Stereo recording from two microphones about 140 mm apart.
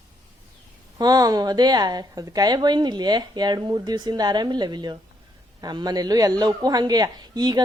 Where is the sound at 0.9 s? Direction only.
30° right (ahead or behind).